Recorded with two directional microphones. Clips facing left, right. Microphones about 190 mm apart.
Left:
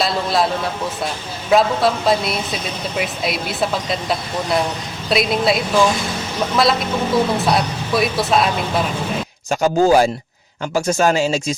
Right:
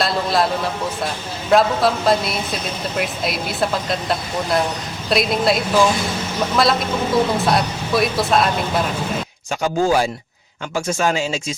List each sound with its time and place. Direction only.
0.0 s a man's voice: centre (ahead or behind)
9.5 s speech: 40° left (ahead or behind)